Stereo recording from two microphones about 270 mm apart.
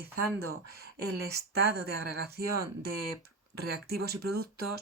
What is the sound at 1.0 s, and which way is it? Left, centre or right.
Speech, right.